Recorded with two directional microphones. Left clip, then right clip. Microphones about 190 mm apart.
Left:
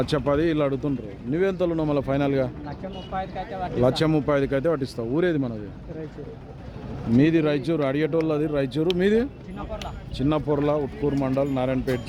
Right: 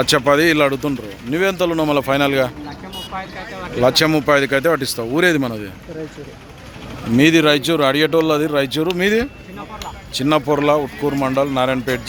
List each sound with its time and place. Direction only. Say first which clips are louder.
0.0 s speech: right 9 dB; 10° right (ahead or behind)
3.8 s speech: right 9 dB; 5° left (ahead or behind); by 5.5 s 10° right (ahead or behind)
7.2 s speech: right 8 dB; 10° right (ahead or behind)
10.8 s speech: right 6 dB; 30° right (ahead or behind)
11.2 s speech: right 9 dB; 10° right (ahead or behind)